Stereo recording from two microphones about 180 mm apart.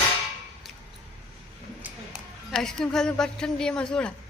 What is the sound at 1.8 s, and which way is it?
Speech, centre (ahead or behind).